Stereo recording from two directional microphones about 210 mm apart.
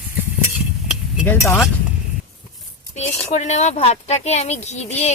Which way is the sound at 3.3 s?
35° left (ahead or behind).